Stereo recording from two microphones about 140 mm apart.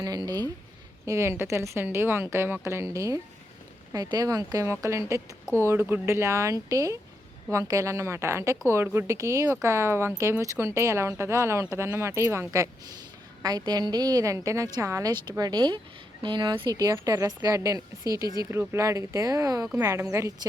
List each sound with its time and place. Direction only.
0.0 s a woman's voice: 30° right (ahead or behind)